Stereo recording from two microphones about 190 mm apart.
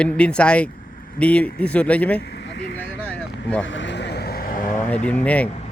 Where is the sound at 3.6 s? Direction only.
75° left (ahead or behind); by 4.8 s 50° left (ahead or behind).